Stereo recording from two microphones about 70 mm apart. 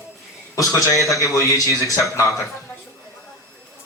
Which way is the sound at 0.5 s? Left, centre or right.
Left.